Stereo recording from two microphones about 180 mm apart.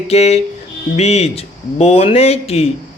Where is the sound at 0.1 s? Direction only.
35° left (ahead or behind).